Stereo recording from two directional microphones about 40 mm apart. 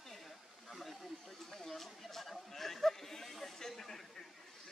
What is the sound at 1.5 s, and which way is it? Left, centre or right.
Chatter, centre.